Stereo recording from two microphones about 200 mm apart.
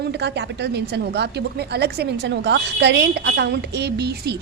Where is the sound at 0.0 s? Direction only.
60° right (ahead or behind).